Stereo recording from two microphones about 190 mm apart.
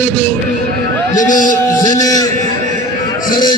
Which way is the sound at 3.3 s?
20° left (ahead or behind).